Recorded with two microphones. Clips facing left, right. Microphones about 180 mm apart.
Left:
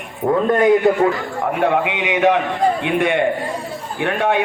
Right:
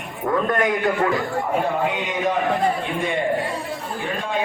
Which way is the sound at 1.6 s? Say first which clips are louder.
Left 5 dB; 70° left (ahead or behind).